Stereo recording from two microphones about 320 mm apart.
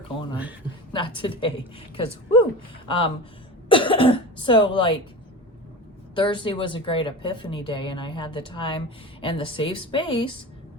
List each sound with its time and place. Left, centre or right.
0.9 s a woman's voice: centre
6.1 s a woman's voice: centre